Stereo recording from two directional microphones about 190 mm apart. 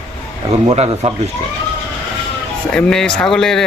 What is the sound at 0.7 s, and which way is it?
Speech, 30° right (ahead or behind).